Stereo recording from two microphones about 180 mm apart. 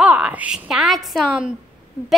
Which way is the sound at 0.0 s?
5° right (ahead or behind).